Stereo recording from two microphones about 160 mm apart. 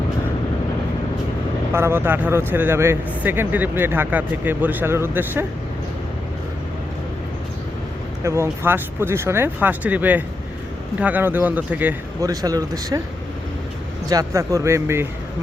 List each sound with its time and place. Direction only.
1.7 s speech: 15° right (ahead or behind)
8.2 s speech: 15° right (ahead or behind)
12.2 s speech: 20° right (ahead or behind)
14.1 s speech: 20° right (ahead or behind)